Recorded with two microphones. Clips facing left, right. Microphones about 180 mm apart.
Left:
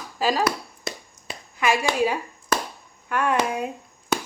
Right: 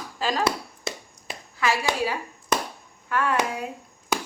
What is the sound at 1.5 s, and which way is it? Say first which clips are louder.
Speech: left 3 dB; 15° left (ahead or behind).